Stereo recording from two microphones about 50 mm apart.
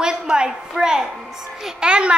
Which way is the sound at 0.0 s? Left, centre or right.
Centre.